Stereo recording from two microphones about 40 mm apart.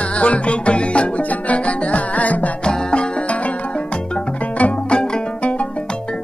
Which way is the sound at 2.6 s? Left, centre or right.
Left.